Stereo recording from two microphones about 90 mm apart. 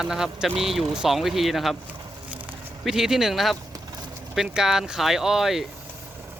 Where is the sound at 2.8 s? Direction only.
5° right (ahead or behind).